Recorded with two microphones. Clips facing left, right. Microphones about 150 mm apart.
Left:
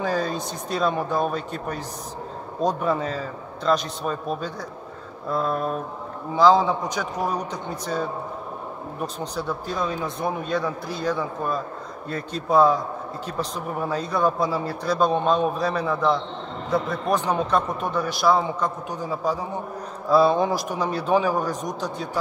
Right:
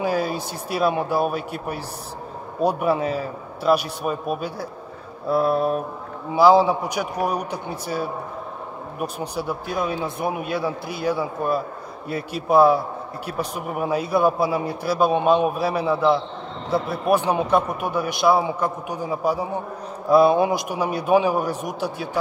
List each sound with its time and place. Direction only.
0.0 s a man's voice: 10° right (ahead or behind)